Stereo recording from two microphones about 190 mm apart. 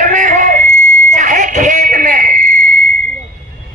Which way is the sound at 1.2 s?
40° right (ahead or behind).